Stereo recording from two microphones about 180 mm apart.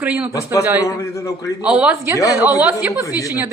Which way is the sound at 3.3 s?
15° right (ahead or behind).